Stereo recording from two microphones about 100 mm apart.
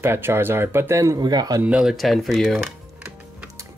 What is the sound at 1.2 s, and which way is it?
Speech, 45° right (ahead or behind).